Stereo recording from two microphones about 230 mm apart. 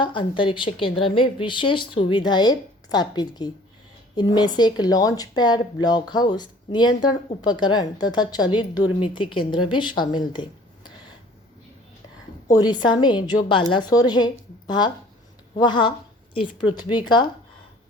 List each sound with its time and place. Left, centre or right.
0.0 s speech: left
12.5 s speech: centre
15.5 s speech: centre